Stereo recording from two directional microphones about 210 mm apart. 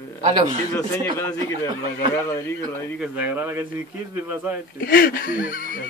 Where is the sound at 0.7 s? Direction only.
15° left (ahead or behind).